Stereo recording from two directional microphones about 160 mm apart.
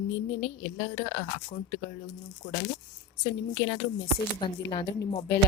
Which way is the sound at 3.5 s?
90° left.